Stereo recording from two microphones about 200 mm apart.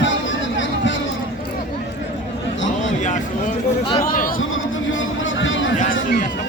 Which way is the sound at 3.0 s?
40° left (ahead or behind).